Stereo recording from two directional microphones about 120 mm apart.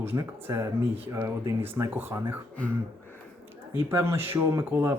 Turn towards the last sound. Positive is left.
turn(degrees=-20)  # may be behind; listen again after turning